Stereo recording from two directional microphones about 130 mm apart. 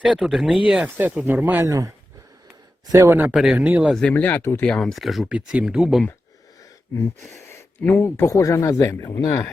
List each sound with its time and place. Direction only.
0.0 s speech: 5° right (ahead or behind)
1.6 s speech: 25° right (ahead or behind)
2.9 s speech: 20° right (ahead or behind)
3.9 s speech: 10° left (ahead or behind)
4.7 s speech: 5° left (ahead or behind)
7.4 s a man's voice: 20° left (ahead or behind)